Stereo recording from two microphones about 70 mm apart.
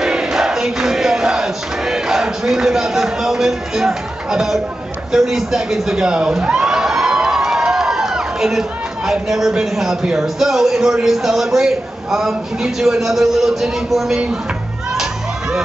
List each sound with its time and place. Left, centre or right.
0.0 s music: centre
5.1 s a man's voice: centre